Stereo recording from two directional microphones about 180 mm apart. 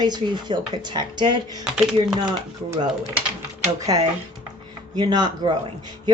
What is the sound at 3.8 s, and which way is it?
A woman's voice, 20° right (ahead or behind).